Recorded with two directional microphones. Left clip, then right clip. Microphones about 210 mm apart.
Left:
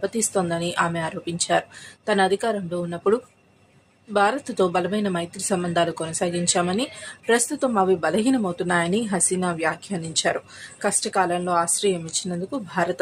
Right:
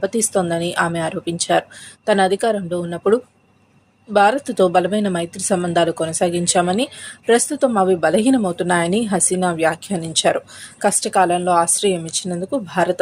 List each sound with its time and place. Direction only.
0.0 s a woman's voice: 20° right (ahead or behind)